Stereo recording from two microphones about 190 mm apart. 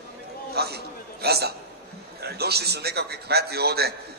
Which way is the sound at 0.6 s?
55° right (ahead or behind).